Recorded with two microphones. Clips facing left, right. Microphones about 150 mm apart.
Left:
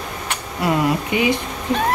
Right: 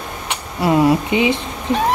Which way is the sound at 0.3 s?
25° right (ahead or behind).